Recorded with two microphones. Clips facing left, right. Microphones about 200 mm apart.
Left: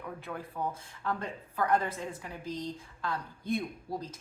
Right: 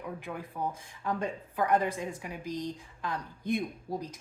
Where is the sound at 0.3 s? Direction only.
15° right (ahead or behind).